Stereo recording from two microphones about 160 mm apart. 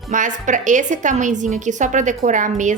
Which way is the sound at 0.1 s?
50° right (ahead or behind).